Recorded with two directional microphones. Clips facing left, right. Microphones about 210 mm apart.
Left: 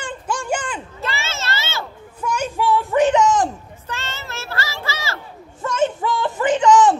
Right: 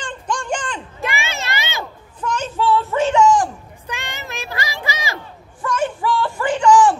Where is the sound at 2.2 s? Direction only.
10° left (ahead or behind).